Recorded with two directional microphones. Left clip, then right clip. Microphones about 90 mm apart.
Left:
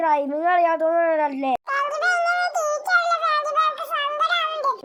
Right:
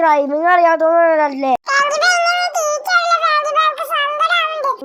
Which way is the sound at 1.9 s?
50° right (ahead or behind).